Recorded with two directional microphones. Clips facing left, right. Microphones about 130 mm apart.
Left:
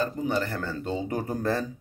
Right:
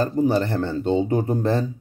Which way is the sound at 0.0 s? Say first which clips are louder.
Right 7 dB; 35° right (ahead or behind).